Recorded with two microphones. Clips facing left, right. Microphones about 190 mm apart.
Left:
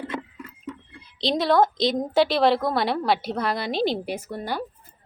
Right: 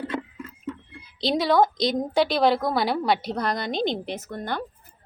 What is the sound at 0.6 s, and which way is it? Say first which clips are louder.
Speech: right 3 dB; 5° right (ahead or behind).